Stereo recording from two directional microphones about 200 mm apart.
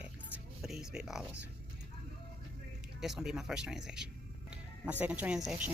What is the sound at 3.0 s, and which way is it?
Speech, centre (ahead or behind).